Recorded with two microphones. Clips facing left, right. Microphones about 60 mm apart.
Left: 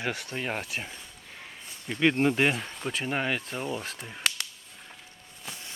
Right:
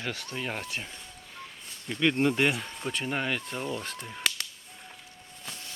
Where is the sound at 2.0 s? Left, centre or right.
Centre.